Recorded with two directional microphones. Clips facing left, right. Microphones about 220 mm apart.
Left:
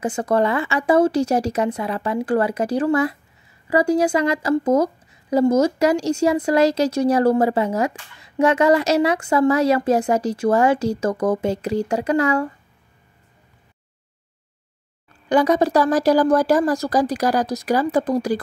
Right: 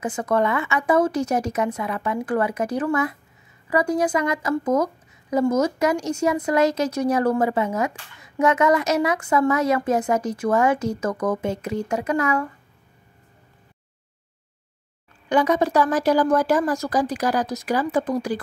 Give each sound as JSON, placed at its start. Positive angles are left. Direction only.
{"t": 0.0, "sound": "a woman's voice", "side_deg": 30}
{"t": 15.2, "sound": "a woman's voice", "side_deg": 35}